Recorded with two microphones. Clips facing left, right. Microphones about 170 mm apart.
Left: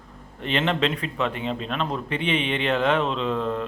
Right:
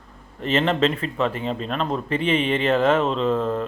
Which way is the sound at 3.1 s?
40° right (ahead or behind).